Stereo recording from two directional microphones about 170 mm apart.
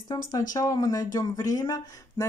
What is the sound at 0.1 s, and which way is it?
A woman's voice, 25° left (ahead or behind).